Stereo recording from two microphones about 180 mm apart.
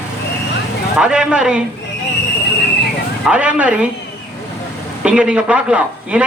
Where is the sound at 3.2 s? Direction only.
5° right (ahead or behind).